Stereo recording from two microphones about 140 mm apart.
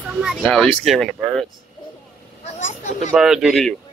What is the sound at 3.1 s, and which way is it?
Speech, 5° right (ahead or behind).